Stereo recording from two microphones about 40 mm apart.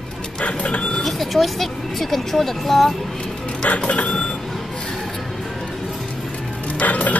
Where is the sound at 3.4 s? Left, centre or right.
Left.